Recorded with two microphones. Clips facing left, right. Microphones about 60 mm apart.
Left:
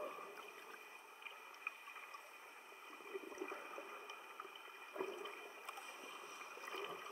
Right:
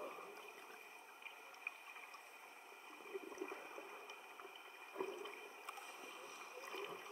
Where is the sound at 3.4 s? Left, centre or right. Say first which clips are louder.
Left 1 dB; centre.